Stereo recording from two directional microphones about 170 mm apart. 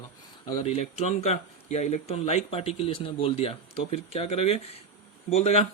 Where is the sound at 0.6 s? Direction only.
40° left (ahead or behind).